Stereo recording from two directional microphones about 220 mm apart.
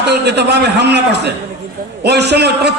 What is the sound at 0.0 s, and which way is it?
A man's voice, 50° right (ahead or behind).